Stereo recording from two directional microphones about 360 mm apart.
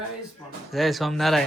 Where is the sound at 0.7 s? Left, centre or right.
Centre.